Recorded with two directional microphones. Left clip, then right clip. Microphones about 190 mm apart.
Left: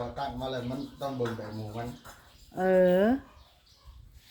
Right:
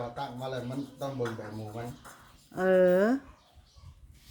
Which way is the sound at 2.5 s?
5° right (ahead or behind).